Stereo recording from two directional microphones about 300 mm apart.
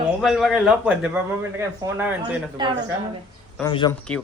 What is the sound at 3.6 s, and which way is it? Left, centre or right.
Speech, centre.